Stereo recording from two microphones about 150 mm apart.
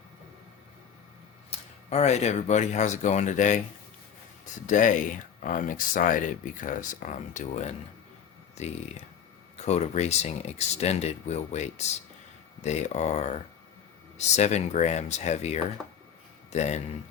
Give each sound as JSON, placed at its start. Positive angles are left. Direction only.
{"t": 1.5, "sound": "speech", "side_deg": 45}
{"t": 4.6, "sound": "speech", "side_deg": 55}